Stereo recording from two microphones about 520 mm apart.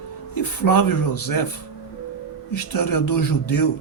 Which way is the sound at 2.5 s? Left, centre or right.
Left.